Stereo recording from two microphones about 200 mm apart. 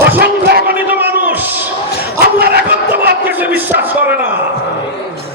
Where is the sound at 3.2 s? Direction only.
10° right (ahead or behind).